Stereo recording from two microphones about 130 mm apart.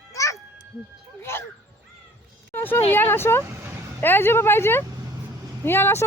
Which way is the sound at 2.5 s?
15° left (ahead or behind).